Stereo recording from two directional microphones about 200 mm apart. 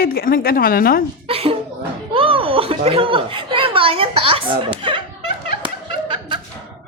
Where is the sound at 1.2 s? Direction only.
30° right (ahead or behind).